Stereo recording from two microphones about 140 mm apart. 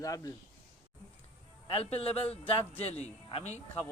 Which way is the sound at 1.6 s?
40° left (ahead or behind).